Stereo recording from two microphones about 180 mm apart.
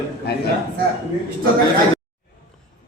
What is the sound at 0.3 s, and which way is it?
Speech, 60° left (ahead or behind).